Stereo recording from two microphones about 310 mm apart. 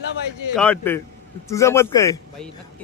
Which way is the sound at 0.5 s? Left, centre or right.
Centre.